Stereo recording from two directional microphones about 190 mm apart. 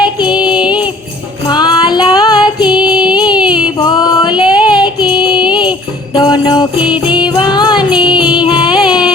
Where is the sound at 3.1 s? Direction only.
20° left (ahead or behind).